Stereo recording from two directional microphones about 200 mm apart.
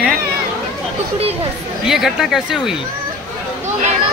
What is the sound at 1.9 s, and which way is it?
Speech, centre (ahead or behind).